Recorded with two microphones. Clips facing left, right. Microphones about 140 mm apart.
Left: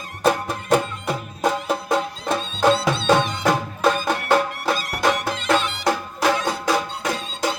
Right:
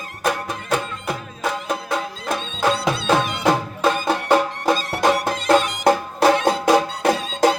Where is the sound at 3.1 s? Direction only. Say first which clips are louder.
Even; 5° right (ahead or behind).